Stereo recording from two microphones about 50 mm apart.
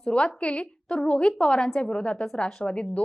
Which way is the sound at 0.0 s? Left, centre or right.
Centre.